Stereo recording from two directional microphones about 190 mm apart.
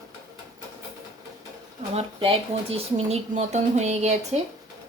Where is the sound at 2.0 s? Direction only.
30° right (ahead or behind).